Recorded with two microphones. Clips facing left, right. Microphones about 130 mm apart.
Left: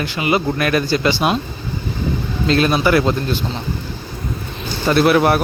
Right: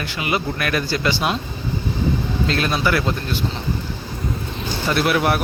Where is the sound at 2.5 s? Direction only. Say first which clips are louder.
Left 7 dB; 20° left (ahead or behind).